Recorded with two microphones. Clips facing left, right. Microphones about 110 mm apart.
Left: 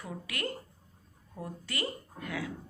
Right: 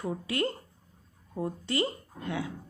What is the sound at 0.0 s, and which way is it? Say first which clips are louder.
Speech: right 7 dB; 30° right (ahead or behind).